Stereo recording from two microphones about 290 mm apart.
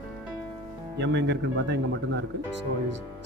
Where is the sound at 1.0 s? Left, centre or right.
Right.